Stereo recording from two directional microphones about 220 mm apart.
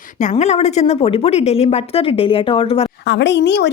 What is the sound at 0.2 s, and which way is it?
Speech, 35° left (ahead or behind).